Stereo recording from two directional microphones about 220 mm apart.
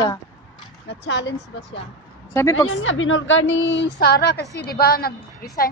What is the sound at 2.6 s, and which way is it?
A woman's voice, 65° left (ahead or behind).